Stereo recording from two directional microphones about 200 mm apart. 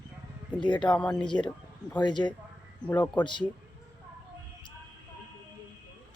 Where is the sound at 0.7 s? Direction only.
5° left (ahead or behind).